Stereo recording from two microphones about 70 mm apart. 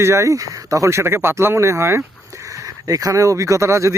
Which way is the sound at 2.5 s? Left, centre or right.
Right.